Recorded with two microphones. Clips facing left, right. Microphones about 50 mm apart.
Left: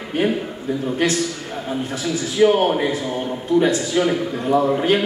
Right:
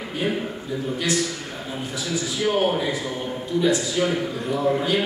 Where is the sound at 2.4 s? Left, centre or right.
Left.